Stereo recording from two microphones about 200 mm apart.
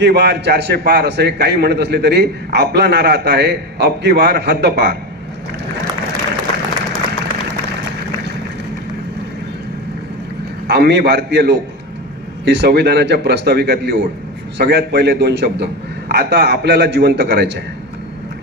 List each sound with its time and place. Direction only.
0.0 s a man's voice: 55° right (ahead or behind)
10.7 s a man's voice: 55° right (ahead or behind)